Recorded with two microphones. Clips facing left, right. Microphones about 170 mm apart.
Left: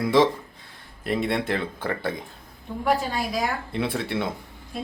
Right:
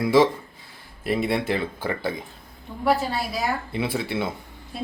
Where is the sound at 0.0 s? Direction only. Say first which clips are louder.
Right 1 dB; 5° right (ahead or behind).